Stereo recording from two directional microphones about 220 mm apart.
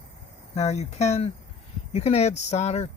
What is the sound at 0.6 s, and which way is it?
Speech, 30° left (ahead or behind).